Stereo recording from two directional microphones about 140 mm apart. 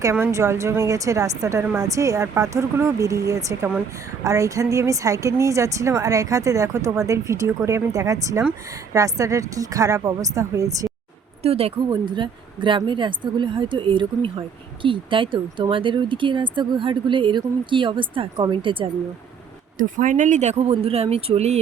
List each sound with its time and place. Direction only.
0.0 s a woman's voice: 20° right (ahead or behind)
11.4 s speech: 45° right (ahead or behind)
11.9 s a woman's voice: 35° right (ahead or behind)
19.8 s speech: 70° right (ahead or behind); by 21.6 s 50° right (ahead or behind)